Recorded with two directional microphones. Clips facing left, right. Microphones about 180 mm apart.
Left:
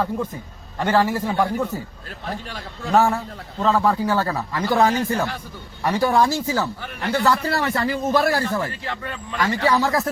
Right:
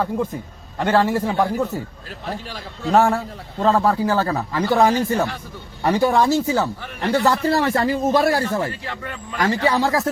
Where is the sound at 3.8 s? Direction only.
30° right (ahead or behind).